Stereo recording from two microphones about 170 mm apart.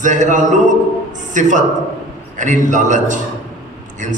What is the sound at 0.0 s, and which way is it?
A man's voice, 45° right (ahead or behind).